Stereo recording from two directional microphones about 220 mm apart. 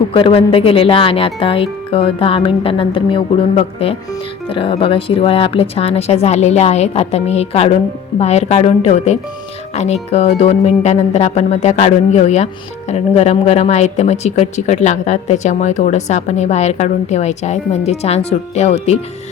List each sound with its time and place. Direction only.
0.1 s speech: 25° left (ahead or behind)